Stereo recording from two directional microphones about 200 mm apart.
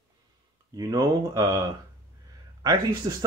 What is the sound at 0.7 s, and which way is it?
Speech, 20° right (ahead or behind).